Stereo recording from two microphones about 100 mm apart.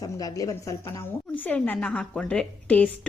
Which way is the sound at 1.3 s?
15° left (ahead or behind).